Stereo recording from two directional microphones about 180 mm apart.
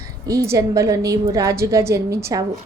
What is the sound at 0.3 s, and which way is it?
A woman's voice, 15° right (ahead or behind).